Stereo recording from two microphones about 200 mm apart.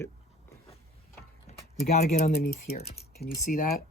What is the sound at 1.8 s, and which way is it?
Speech, 40° left (ahead or behind).